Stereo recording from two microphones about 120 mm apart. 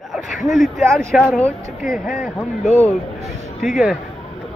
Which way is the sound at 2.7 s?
65° left (ahead or behind).